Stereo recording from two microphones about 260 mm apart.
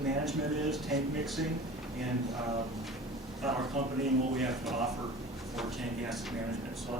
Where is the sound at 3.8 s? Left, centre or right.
Right.